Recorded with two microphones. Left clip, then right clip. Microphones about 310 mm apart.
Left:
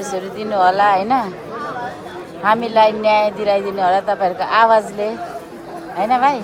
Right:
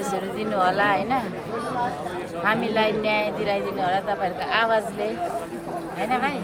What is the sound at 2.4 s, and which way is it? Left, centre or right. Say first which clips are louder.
Speech: left 9 dB; centre.